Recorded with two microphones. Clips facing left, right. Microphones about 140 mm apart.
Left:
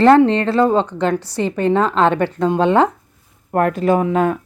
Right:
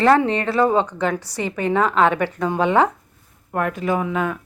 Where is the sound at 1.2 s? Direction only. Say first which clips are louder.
Left 5 dB; 25° left (ahead or behind).